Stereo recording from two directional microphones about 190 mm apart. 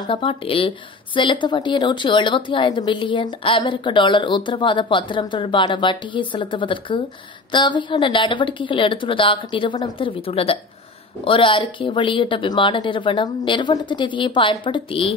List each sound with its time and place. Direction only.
0.0 s a woman's voice: 25° left (ahead or behind)